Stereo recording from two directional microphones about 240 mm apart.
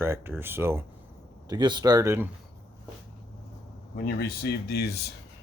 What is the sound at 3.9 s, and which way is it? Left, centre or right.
Speech, left.